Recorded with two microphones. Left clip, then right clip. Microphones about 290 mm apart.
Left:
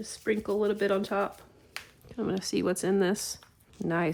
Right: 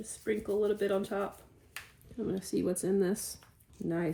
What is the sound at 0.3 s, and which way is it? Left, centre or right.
Speech, left.